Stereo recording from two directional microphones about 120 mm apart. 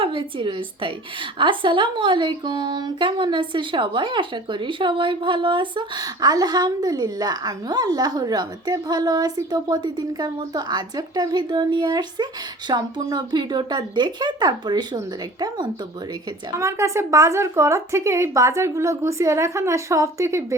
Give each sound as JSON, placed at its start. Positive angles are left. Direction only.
{"t": 0.0, "sound": "a woman's voice", "side_deg": -45}
{"t": 16.6, "sound": "speech", "side_deg": -25}